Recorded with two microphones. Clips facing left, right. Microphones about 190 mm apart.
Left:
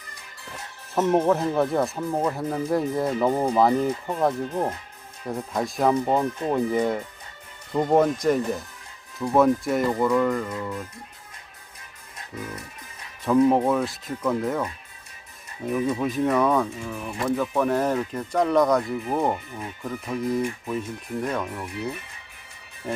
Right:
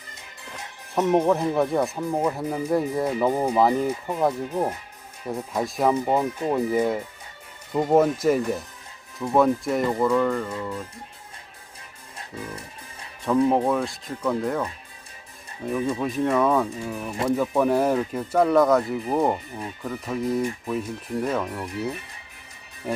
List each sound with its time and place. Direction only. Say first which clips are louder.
1.1 s speech: right 1 dB; centre (ahead or behind)
12.3 s speech: left 1 dB; 30° right (ahead or behind)
13.2 s speech: left 1 dB; centre (ahead or behind)